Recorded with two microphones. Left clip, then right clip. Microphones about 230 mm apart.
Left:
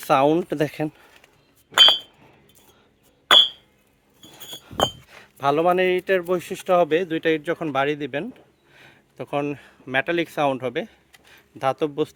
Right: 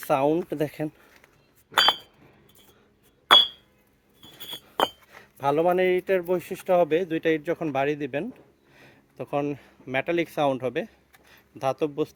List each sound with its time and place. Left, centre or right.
0.1 s speech: left
4.2 s glass: centre
4.6 s speech: centre